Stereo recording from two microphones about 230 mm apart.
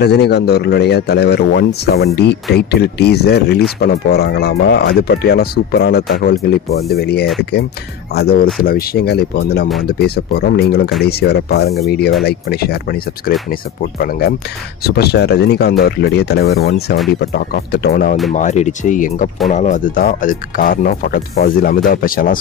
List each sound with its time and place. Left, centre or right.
0.0 s speech: left
18.3 s speech: left